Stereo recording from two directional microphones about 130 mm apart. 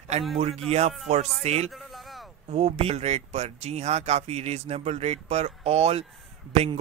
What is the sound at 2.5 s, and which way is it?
Speech, 50° right (ahead or behind).